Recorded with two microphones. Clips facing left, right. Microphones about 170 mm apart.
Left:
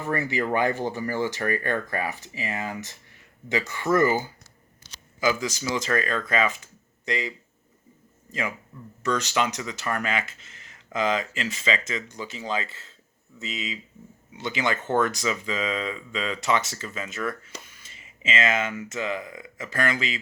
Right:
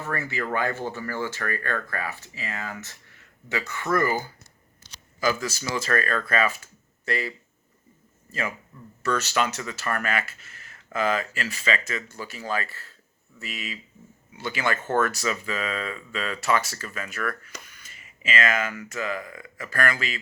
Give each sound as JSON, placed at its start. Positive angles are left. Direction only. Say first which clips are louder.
{"t": 0.0, "sound": "speech", "louder": "left 4 dB", "side_deg": 15}